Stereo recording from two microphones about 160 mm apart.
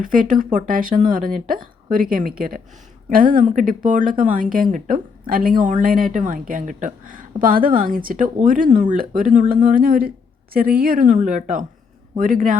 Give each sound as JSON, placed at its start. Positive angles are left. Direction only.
{"t": 0.0, "sound": "speech", "side_deg": -55}